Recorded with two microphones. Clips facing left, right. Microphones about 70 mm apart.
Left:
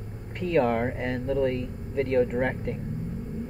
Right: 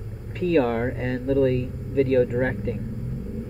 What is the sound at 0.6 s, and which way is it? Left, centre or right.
Speech, centre.